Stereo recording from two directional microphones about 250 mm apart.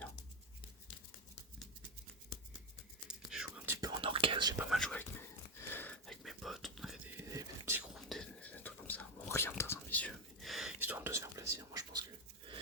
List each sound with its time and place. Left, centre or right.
3.3 s whispering: centre
3.8 s whispering: centre
4.7 s speech: centre
5.5 s whispering: centre
8.1 s whispering: centre